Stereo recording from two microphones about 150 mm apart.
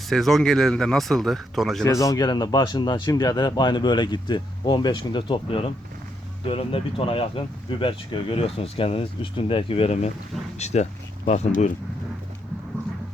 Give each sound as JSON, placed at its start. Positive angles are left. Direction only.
{"t": 0.1, "sound": "speech", "side_deg": 0}
{"t": 1.8, "sound": "speech", "side_deg": 20}